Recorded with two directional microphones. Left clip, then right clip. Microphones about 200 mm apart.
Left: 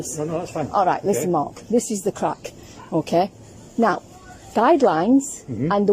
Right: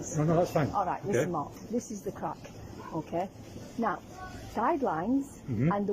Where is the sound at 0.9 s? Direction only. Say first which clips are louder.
Left 10 dB; 55° left (ahead or behind).